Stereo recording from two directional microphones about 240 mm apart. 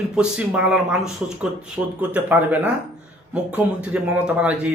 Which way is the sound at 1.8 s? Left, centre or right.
Centre.